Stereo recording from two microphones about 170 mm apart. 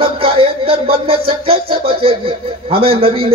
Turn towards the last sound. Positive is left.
turn(degrees=-35)  # may be behind; listen again after turning